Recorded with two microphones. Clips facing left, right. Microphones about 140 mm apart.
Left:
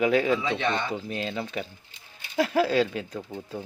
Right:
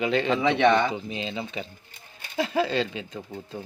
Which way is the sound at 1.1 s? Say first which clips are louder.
Left 1 dB; centre (ahead or behind).